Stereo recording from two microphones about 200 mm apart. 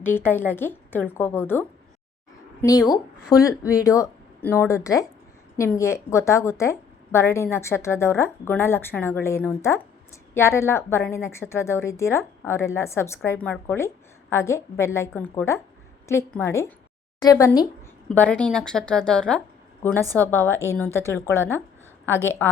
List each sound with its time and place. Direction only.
0.0 s a woman's voice: 10° left (ahead or behind)
18.1 s a woman's voice: 5° left (ahead or behind)